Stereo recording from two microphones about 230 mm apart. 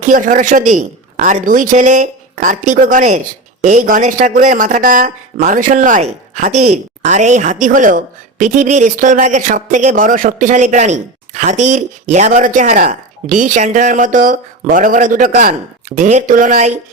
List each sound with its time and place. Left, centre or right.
0.0 s a woman's voice: right